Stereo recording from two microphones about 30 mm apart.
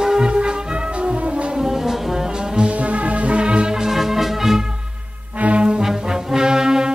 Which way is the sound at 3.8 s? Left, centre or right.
Centre.